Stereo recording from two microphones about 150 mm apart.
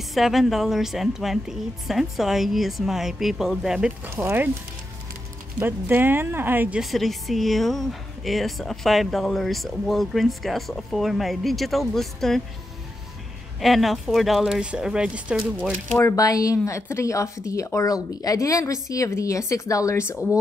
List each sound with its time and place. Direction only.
0.1 s speech: centre (ahead or behind)
5.6 s speech: 15° right (ahead or behind)
6.8 s speech: centre (ahead or behind)
13.6 s speech: centre (ahead or behind)
16.0 s a woman's voice: 20° left (ahead or behind)